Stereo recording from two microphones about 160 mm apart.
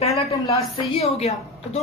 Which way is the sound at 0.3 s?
40° left (ahead or behind).